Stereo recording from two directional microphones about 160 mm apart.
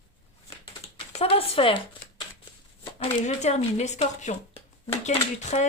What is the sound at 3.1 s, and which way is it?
Speech, 45° left (ahead or behind).